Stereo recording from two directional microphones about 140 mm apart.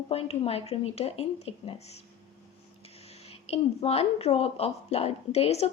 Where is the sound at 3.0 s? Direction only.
50° left (ahead or behind).